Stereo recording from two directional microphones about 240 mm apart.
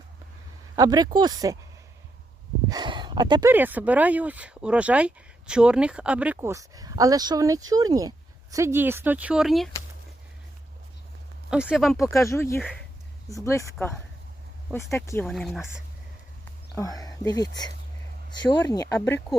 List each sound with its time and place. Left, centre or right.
0.8 s speech: centre
2.6 s speech: centre
3.5 s speech: centre
11.5 s speech: centre
12.1 s speech: centre
16.7 s speech: centre